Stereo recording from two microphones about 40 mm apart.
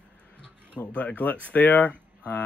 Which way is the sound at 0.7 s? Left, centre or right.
Left.